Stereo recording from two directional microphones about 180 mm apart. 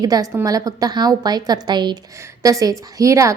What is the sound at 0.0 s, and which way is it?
A woman's voice, 20° right (ahead or behind).